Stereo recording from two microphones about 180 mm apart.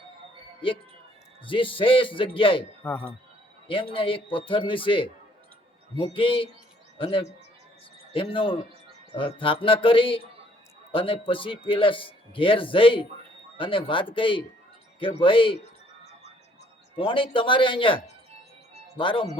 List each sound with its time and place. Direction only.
1.5 s a man's voice: 30° left (ahead or behind)
2.8 s speech: 10° left (ahead or behind)
3.9 s a man's voice: 30° left (ahead or behind)
16.9 s a man's voice: 30° left (ahead or behind)